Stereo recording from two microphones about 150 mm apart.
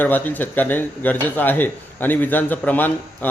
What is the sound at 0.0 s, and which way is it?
Speech, 10° left (ahead or behind).